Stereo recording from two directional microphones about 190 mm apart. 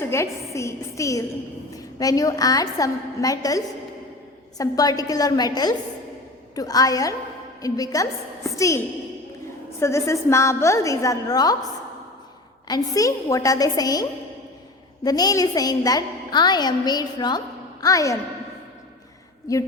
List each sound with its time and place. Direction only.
0.0 s a woman's voice: 15° left (ahead or behind)
9.8 s a woman's voice: 15° left (ahead or behind)
12.6 s a woman's voice: 20° left (ahead or behind)
19.5 s a woman's voice: 20° left (ahead or behind)